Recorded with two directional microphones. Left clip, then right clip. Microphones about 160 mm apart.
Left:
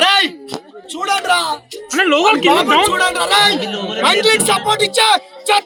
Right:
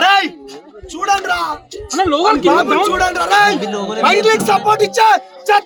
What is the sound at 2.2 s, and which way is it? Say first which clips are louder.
Speech: even; 20° left (ahead or behind).